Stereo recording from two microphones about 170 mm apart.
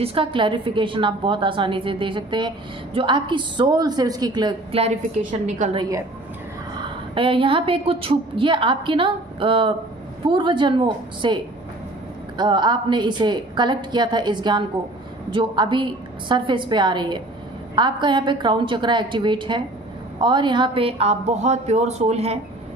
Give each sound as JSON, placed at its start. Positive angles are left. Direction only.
{"t": 0.0, "sound": "a woman's voice", "side_deg": -30}
{"t": 5.8, "sound": "a woman's voice", "side_deg": -20}
{"t": 6.8, "sound": "a woman's voice", "side_deg": -30}